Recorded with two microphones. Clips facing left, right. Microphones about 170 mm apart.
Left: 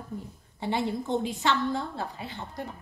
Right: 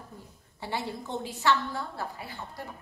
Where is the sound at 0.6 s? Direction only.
20° left (ahead or behind).